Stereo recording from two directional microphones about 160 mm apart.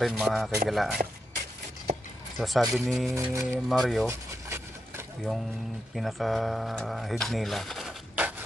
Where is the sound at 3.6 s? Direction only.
Centre (ahead or behind).